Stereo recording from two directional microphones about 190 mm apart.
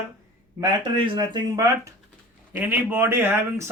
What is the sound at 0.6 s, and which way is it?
Speech, 25° right (ahead or behind).